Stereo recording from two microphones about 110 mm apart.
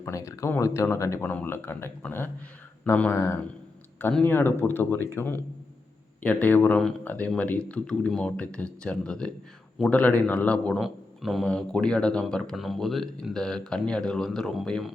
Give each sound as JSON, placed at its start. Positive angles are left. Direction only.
{"t": 0.0, "sound": "speech", "side_deg": 30}
{"t": 1.2, "sound": "speech", "side_deg": 15}
{"t": 10.8, "sound": "speech", "side_deg": 0}